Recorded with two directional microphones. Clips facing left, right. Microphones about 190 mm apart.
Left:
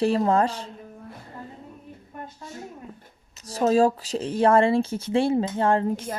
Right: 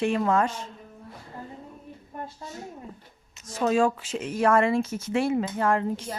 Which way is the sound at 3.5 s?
35° left (ahead or behind).